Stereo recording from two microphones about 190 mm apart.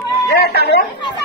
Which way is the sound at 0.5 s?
60° left (ahead or behind).